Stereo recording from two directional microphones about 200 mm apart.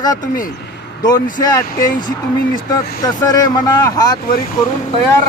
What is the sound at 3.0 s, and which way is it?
Speech, 20° left (ahead or behind).